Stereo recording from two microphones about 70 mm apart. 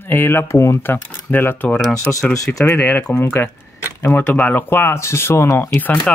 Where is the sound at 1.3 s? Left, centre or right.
Left.